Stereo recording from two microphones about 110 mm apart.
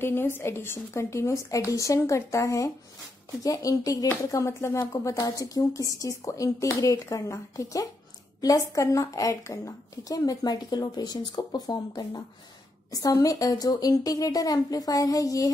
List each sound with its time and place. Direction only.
0.0 s a woman's voice: 20° left (ahead or behind)